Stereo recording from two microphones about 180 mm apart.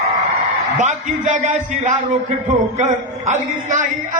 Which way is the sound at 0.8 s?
45° right (ahead or behind).